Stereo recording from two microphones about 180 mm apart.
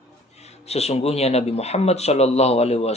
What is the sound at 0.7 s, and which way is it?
A man's voice, 35° left (ahead or behind).